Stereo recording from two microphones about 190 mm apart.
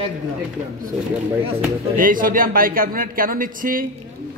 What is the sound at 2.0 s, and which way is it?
Speech, 45° right (ahead or behind).